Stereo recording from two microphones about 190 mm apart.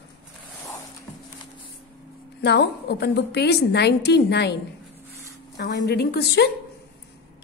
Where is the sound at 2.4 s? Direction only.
60° left (ahead or behind).